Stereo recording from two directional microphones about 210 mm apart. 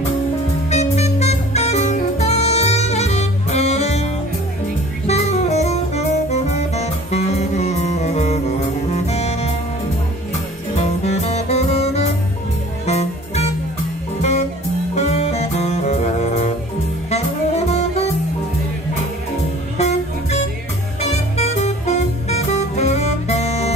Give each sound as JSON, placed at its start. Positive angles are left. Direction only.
{"t": 0.7, "sound": "music", "side_deg": 30}
{"t": 5.0, "sound": "saxophone", "side_deg": 30}
{"t": 10.8, "sound": "music", "side_deg": 30}
{"t": 15.0, "sound": "music", "side_deg": 30}
{"t": 17.1, "sound": "saxophone", "side_deg": 30}
{"t": 21.0, "sound": "music", "side_deg": 30}